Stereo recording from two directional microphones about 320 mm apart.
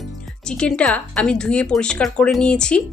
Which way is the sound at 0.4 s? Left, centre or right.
Centre.